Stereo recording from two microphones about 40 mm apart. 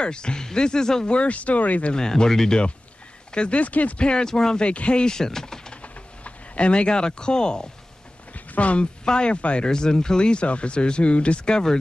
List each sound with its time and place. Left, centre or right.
0.0 s speech: left
1.1 s speech: left
2.0 s speech: centre
3.3 s speech: left
4.0 s speech: left
4.6 s speech: left
5.0 s speech: centre
5.8 s a sound: left
8.3 s a sound: left
9.0 s speech: left
9.7 s speech: centre